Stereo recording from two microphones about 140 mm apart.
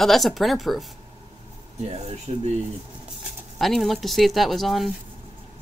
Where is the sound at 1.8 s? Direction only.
50° right (ahead or behind).